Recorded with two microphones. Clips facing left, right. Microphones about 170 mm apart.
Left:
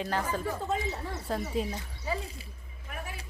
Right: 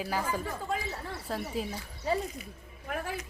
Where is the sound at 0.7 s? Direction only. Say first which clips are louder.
Left 2 dB; 20° left (ahead or behind).